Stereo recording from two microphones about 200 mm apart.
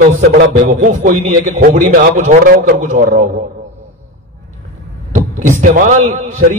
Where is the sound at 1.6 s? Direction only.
45° right (ahead or behind).